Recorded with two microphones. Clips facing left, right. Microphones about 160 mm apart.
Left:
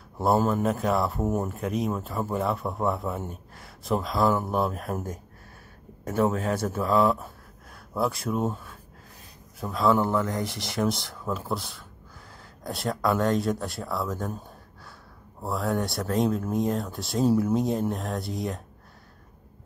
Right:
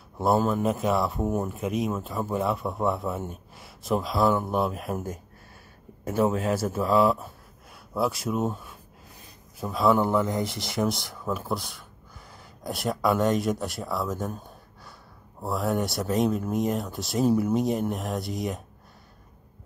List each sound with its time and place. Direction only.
0.2 s speech: centre (ahead or behind)
1.5 s speech: 20° right (ahead or behind)
1.9 s speech: centre (ahead or behind)
10.1 s speech: 20° right (ahead or behind)
11.0 s speech: centre (ahead or behind)
15.4 s speech: 5° right (ahead or behind)